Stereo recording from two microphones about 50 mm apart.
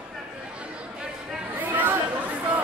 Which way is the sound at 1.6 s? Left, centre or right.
Right.